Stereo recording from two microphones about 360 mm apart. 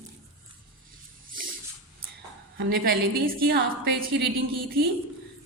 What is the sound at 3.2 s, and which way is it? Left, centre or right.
Speech, right.